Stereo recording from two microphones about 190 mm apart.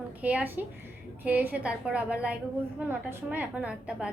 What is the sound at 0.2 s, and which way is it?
A woman's voice, 10° right (ahead or behind).